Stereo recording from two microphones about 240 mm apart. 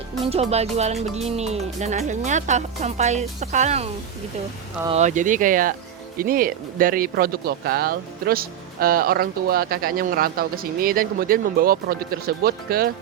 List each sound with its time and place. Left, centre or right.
0.5 s speech: right